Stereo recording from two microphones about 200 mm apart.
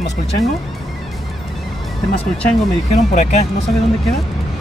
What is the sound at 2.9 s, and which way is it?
Speech, 35° left (ahead or behind).